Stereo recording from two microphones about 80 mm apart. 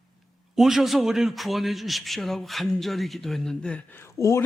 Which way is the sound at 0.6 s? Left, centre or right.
Centre.